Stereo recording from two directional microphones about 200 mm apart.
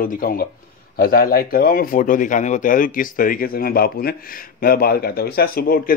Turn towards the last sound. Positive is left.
turn(degrees=50)  # may be behind; listen again after turning